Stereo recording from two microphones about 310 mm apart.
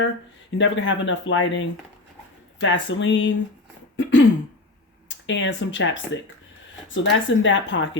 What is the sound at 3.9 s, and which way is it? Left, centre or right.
Throat clearing, left.